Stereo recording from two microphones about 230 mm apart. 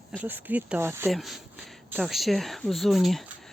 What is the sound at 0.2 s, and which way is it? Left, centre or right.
Speech, centre.